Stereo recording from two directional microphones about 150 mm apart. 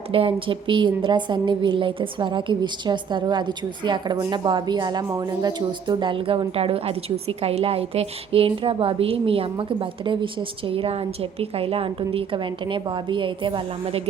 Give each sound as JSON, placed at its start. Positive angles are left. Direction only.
{"t": 0.1, "sound": "a woman's voice", "side_deg": -35}